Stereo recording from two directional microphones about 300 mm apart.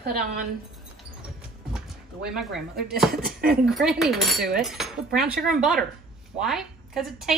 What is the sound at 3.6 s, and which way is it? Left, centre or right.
Chopping, centre.